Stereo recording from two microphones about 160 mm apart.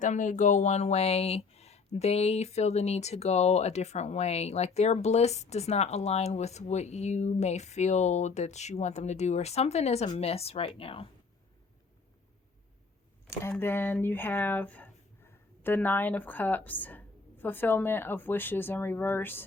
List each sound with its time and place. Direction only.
0.0 s speech: 50° left (ahead or behind); by 11.1 s 35° left (ahead or behind)
13.3 s a woman's voice: 15° left (ahead or behind)